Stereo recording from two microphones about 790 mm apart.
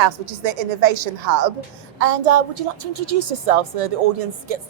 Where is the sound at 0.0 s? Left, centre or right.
Right.